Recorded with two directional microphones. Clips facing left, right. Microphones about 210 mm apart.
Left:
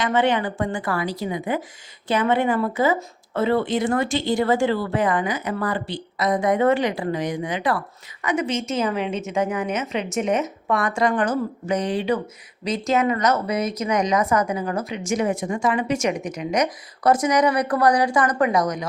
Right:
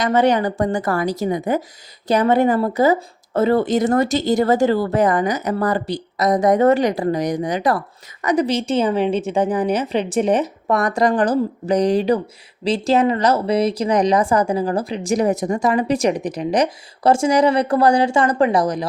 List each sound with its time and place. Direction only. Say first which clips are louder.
0.0 s speech: right 4 dB; 40° right (ahead or behind)